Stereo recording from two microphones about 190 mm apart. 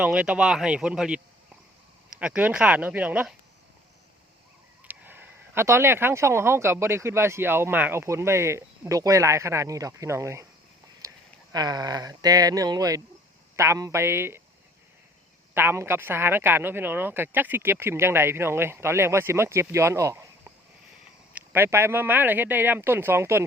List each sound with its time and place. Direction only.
0.0 s speech: 5° right (ahead or behind)
4.8 s speech: 10° right (ahead or behind)
11.0 s a sound: 15° right (ahead or behind)
11.5 s speech: 20° right (ahead or behind)
15.5 s speech: 10° right (ahead or behind)
21.3 s speech: 10° right (ahead or behind)